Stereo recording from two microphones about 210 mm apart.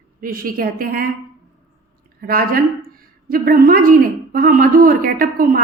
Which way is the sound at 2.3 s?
45° right (ahead or behind).